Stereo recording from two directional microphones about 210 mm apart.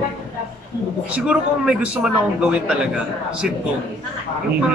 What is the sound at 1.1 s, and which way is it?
A man's voice, 5° right (ahead or behind).